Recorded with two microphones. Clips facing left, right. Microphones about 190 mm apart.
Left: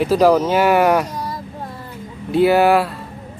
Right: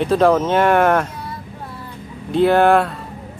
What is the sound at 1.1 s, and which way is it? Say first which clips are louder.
Child singing: left 5 dB; 40° left (ahead or behind).